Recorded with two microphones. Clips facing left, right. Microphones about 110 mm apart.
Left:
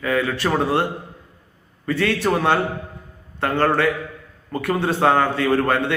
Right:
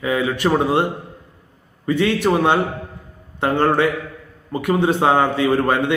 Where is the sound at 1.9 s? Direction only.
15° right (ahead or behind).